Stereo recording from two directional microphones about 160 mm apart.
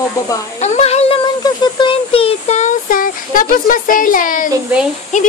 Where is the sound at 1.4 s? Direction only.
30° left (ahead or behind).